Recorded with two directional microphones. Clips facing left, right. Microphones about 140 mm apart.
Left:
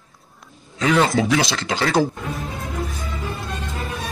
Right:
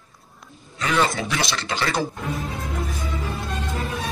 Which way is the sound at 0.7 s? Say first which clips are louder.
Left 5 dB; 90° left.